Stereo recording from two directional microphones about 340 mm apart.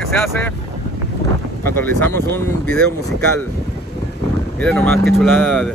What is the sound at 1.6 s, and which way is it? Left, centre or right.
Speech, centre.